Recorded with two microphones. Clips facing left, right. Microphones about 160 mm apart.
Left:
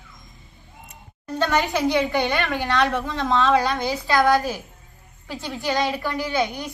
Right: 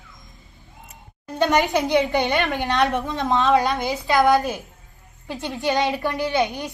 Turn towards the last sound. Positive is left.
turn(degrees=-20)  # may be behind; listen again after turning